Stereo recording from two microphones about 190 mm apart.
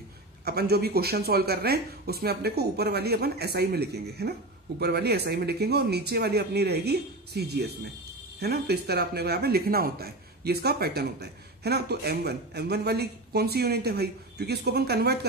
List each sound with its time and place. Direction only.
0.5 s speech: 55° right (ahead or behind)